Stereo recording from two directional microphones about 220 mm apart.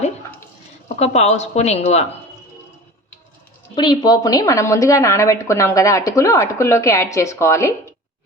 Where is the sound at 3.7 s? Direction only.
20° left (ahead or behind).